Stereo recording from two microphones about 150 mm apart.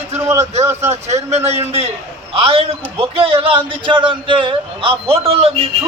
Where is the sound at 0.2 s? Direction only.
20° right (ahead or behind).